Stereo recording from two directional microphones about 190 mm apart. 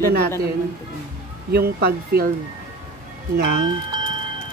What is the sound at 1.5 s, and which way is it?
Speech, 55° right (ahead or behind).